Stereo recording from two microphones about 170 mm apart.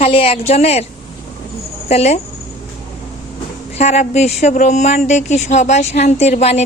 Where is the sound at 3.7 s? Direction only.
40° left (ahead or behind).